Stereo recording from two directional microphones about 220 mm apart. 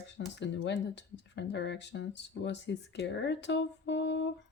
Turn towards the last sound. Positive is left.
turn(degrees=55)  # may be behind; listen again after turning